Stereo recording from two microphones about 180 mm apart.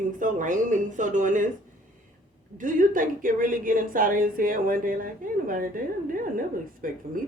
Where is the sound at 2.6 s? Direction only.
45° right (ahead or behind).